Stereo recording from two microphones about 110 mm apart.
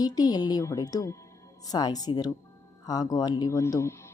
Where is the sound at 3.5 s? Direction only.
25° left (ahead or behind).